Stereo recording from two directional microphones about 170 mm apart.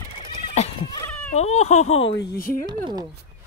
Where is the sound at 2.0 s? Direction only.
80° left; by 2.5 s 65° left (ahead or behind).